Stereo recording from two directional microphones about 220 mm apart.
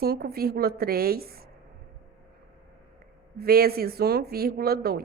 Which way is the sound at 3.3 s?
45° right (ahead or behind).